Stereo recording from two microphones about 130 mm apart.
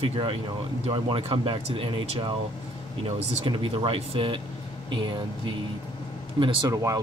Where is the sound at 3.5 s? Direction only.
40° right (ahead or behind).